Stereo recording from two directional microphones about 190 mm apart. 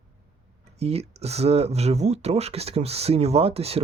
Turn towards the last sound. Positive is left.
turn(degrees=-30)  # may be behind; listen again after turning